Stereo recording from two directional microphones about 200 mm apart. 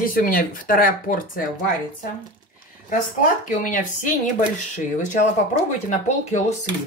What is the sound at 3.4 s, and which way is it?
Speech, 40° left (ahead or behind).